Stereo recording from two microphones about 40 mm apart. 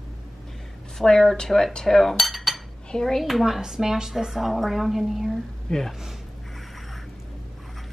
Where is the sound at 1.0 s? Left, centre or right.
Centre.